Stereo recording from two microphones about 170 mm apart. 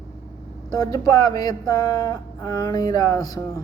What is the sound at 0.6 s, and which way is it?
Speech, 20° left (ahead or behind).